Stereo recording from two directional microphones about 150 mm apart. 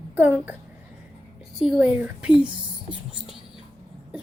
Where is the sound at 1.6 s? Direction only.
5° right (ahead or behind).